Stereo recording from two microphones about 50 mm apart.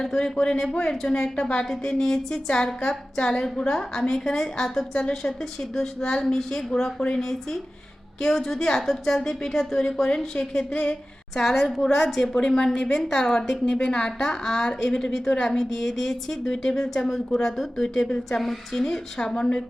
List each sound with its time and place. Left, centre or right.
0.0 s a woman's voice: centre
11.3 s a woman's voice: centre